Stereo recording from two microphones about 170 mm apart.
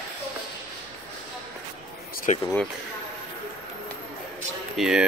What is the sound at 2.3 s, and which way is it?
Speech, 45° left (ahead or behind).